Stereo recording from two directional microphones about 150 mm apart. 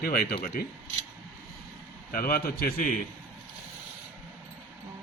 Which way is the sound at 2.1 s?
80° left.